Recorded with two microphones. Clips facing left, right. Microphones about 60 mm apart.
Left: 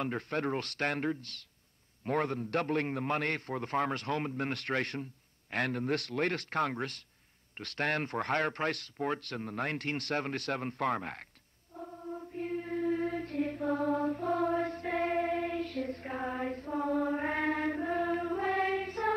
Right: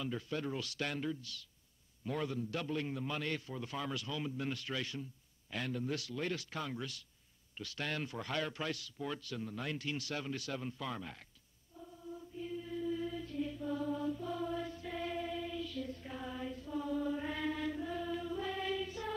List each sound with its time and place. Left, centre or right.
0.0 s speech: left
11.7 s chant: left